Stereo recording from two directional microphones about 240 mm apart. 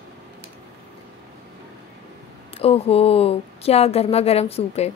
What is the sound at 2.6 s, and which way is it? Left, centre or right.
Speech, left.